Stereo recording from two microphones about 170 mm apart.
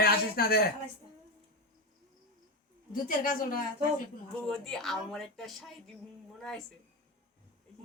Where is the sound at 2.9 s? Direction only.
50° left (ahead or behind).